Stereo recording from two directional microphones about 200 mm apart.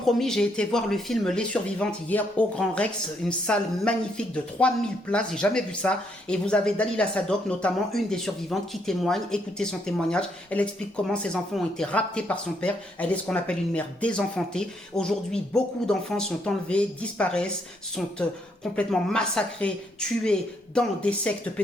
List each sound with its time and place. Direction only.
0.0 s speech: centre (ahead or behind)